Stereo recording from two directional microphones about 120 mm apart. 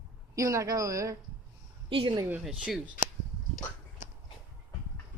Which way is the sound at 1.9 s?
45° right (ahead or behind).